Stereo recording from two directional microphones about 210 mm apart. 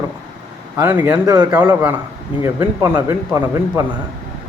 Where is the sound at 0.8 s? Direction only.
10° right (ahead or behind).